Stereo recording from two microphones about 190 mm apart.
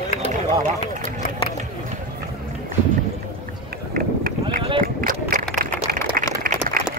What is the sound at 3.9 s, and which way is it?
Run, 50° right (ahead or behind).